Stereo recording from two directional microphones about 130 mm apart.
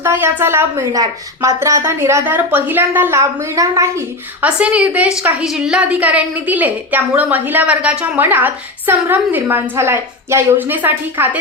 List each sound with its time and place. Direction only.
0.0 s a woman's voice: 20° right (ahead or behind)
4.4 s a woman's voice: 10° right (ahead or behind)